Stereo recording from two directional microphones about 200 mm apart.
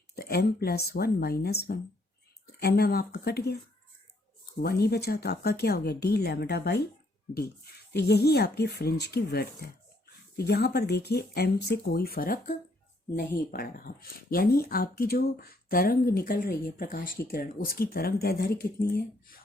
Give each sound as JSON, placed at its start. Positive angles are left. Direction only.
{"t": 0.2, "sound": "speech", "side_deg": 50}
{"t": 4.6, "sound": "speech", "side_deg": 50}